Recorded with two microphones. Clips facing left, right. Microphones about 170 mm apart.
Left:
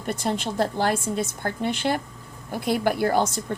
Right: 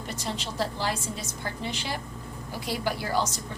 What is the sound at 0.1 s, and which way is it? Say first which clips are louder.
A woman's voice: left 9 dB; 55° left (ahead or behind).